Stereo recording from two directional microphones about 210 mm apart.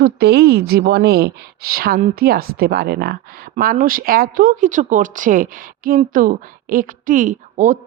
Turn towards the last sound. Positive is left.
turn(degrees=-35)  # may be behind; listen again after turning